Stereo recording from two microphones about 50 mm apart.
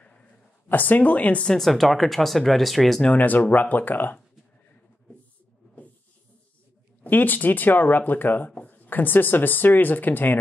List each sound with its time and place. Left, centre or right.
0.7 s speech: left
1.6 s speech: centre
3.1 s speech: left
7.0 s speech: left